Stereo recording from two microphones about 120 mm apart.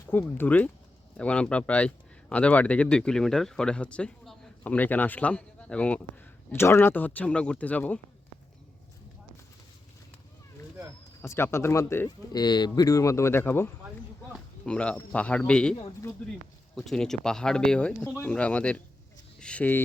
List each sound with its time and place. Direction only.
0.1 s speech: 15° left (ahead or behind)
11.2 s speech: 20° left (ahead or behind)
12.0 s speech: 35° left (ahead or behind); by 18.8 s 10° left (ahead or behind)
19.4 s a sound: 10° left (ahead or behind)